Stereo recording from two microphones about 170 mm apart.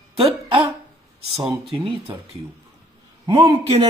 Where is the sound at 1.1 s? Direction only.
35° right (ahead or behind).